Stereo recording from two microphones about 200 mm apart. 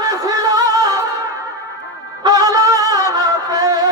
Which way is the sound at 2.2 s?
20° right (ahead or behind).